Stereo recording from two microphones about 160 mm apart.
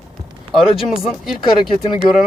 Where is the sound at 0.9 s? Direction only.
Centre (ahead or behind).